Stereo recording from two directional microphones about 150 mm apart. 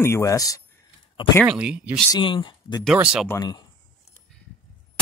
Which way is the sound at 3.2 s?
25° left (ahead or behind).